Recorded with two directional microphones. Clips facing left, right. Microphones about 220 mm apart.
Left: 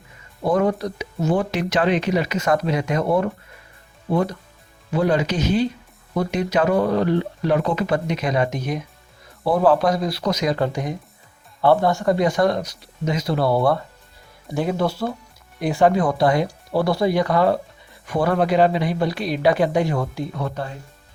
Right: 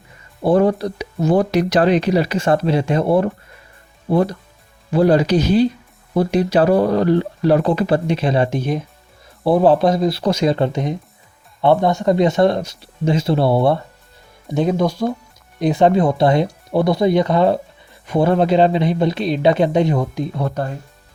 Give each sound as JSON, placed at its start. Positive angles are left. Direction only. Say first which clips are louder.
{"t": 0.4, "sound": "speech", "louder": "right 5 dB", "side_deg": -30}
{"t": 20.4, "sound": "speech", "louder": "right 6 dB", "side_deg": -45}